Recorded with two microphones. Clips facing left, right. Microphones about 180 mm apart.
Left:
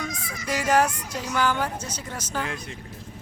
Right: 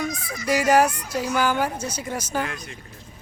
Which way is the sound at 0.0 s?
10° right (ahead or behind).